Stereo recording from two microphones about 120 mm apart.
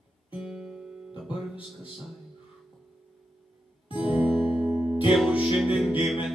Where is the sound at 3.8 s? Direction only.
45° left (ahead or behind).